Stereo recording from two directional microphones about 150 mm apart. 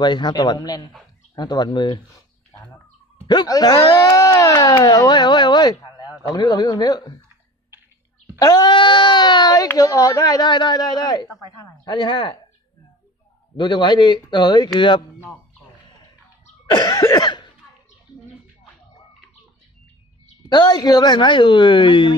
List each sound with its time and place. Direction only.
0.0 s speech: 30° left (ahead or behind)
8.4 s a woman's voice: 25° left (ahead or behind)
13.6 s a woman's voice: 30° left (ahead or behind)
16.7 s cough: 25° left (ahead or behind)
20.4 s a woman's voice: 30° left (ahead or behind)